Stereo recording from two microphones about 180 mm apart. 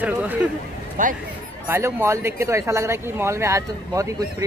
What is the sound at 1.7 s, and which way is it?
Speech, 15° right (ahead or behind).